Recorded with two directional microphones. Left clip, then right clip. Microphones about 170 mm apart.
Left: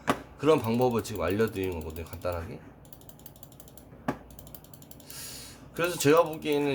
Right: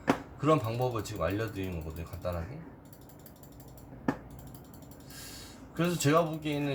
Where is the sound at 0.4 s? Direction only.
85° left.